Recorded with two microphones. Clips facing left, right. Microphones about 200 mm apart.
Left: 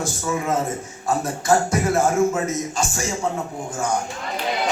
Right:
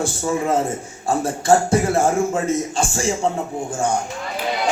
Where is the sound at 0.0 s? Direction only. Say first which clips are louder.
Right 3 dB; 30° right (ahead or behind).